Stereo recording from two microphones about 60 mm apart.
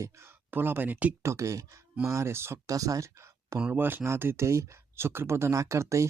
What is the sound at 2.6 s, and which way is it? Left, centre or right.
Speech, right.